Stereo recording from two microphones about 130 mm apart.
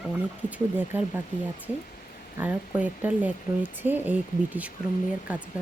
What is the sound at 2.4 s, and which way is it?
Speech, 10° right (ahead or behind).